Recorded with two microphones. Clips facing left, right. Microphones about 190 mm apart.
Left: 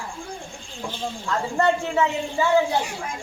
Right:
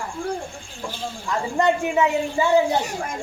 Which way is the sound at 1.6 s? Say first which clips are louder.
Right 2 dB; 15° right (ahead or behind).